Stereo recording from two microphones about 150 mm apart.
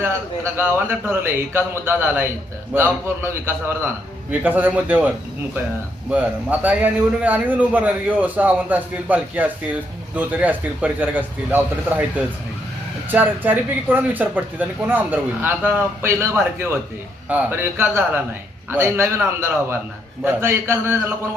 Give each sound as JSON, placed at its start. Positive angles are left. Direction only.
{"t": 0.0, "sound": "speech", "side_deg": -15}